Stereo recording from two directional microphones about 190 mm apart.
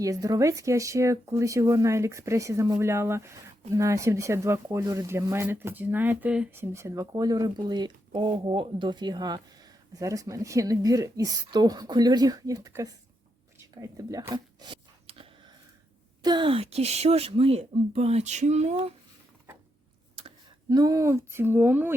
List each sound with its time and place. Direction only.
0.0 s speech: 20° right (ahead or behind)
13.8 s zipper: 20° right (ahead or behind)
16.2 s speech: 25° right (ahead or behind)
20.1 s speech: 25° right (ahead or behind)